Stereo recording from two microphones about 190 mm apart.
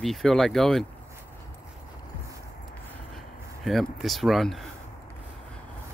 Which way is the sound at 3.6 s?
Centre (ahead or behind).